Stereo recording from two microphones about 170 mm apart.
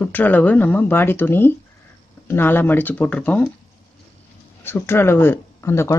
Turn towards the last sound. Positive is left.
turn(degrees=15)  # may be behind; listen again after turning